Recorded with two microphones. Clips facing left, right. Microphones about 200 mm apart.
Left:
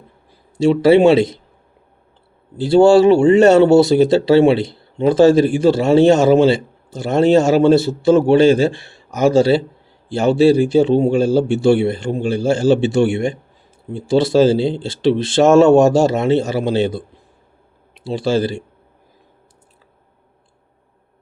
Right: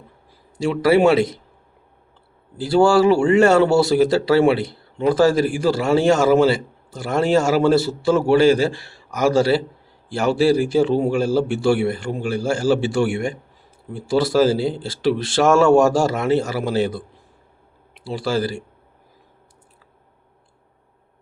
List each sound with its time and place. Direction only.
0.6 s speech: 25° left (ahead or behind)
2.6 s speech: 25° left (ahead or behind)